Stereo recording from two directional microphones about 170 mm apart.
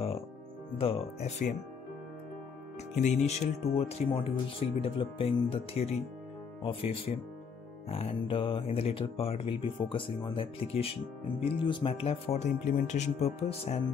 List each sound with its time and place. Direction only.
0.7 s speech: 35° left (ahead or behind)
3.0 s speech: 40° left (ahead or behind)